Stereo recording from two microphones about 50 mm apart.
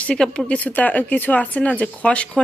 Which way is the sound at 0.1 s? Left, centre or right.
Centre.